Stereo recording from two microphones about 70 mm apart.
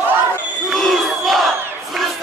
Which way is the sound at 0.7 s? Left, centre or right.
Centre.